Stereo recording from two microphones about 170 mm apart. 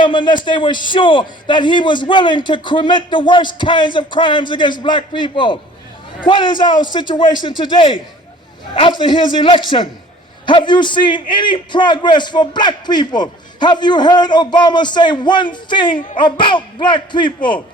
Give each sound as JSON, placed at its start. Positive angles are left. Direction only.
{"t": 0.0, "sound": "a man's voice", "side_deg": 25}